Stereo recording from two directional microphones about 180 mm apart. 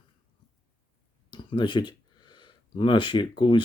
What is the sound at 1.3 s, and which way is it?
Speech, 25° left (ahead or behind).